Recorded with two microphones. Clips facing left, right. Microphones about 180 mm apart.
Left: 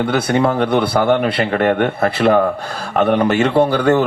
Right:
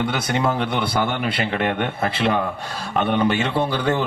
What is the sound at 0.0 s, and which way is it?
A man's voice, 60° left (ahead or behind).